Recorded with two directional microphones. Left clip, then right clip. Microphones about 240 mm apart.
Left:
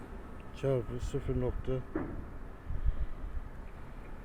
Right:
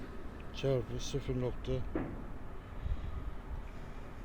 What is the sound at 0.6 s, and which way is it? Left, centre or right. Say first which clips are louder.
Speech: left 1 dB; left.